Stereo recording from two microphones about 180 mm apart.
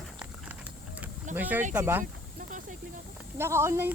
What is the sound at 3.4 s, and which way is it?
Speech, 15° right (ahead or behind).